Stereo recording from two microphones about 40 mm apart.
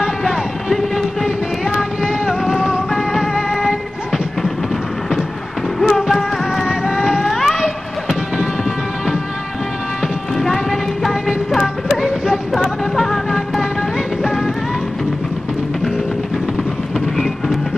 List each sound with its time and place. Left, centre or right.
0.0 s music: centre
0.7 s music: centre
1.8 s a sound: centre
2.9 s music: centre
5.8 s music: centre
6.7 s vehicle: centre
7.2 s a sound: centre
10.3 s music: centre
12.9 s music: centre